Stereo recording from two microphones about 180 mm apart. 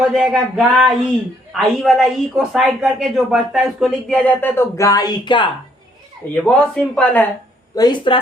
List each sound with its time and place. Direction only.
0.0 s speech: centre (ahead or behind); by 5.5 s 25° left (ahead or behind)
6.3 s speech: 5° left (ahead or behind)
7.8 s speech: 25° left (ahead or behind)